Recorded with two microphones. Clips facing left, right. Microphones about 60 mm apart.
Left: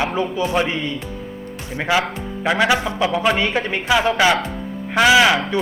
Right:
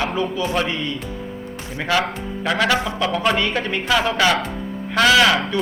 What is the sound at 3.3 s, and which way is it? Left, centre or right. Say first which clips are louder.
A man's voice: left 1 dB; left.